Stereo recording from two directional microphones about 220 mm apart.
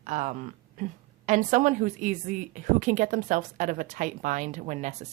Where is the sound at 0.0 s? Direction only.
35° right (ahead or behind).